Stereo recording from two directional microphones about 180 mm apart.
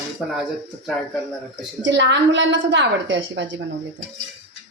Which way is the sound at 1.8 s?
85° right.